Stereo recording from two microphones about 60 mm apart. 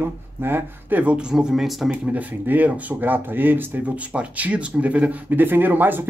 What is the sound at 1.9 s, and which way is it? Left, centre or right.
Speech, right.